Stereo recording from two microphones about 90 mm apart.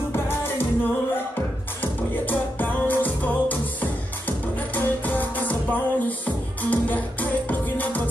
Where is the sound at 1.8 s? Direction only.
20° left (ahead or behind).